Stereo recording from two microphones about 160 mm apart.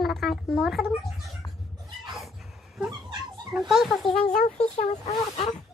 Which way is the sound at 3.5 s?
Centre (ahead or behind).